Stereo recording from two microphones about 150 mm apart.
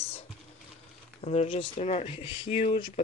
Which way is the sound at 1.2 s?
45° left (ahead or behind).